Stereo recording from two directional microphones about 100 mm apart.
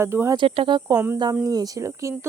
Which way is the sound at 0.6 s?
50° right (ahead or behind).